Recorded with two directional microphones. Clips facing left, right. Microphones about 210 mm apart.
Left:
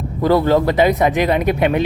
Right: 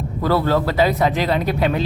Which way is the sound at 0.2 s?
15° left (ahead or behind).